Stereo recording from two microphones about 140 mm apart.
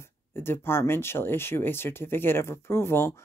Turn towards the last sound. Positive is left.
turn(degrees=15)  # may be behind; listen again after turning